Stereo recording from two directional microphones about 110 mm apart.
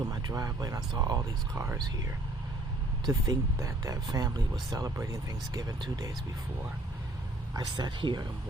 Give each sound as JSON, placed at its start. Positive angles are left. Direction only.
{"t": 0.1, "sound": "speech", "side_deg": -30}
{"t": 1.5, "sound": "speech", "side_deg": -25}
{"t": 3.1, "sound": "speech", "side_deg": -30}
{"t": 7.5, "sound": "speech", "side_deg": -45}